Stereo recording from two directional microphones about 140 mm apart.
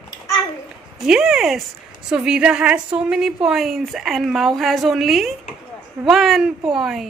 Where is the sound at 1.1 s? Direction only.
5° right (ahead or behind).